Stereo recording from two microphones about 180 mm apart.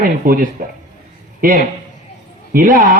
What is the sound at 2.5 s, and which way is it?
Speech, 50° right (ahead or behind).